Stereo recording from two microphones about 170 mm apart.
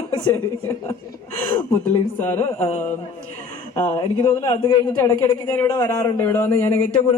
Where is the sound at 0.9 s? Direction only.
15° left (ahead or behind).